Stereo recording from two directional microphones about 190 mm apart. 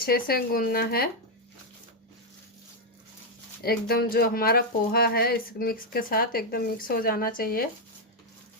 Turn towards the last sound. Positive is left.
turn(degrees=50)  # may be behind; listen again after turning